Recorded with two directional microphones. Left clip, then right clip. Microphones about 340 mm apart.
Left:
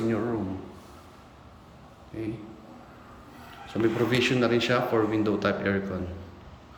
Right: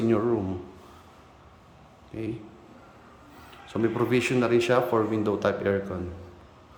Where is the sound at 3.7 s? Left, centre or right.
Centre.